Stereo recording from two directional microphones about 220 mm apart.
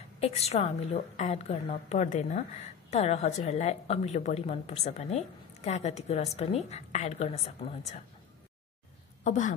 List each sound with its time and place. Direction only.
0.2 s a woman's voice: 30° left (ahead or behind)
9.2 s a woman's voice: 35° left (ahead or behind)